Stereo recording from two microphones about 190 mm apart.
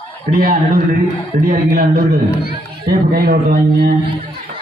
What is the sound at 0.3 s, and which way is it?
A man's voice, 50° right (ahead or behind).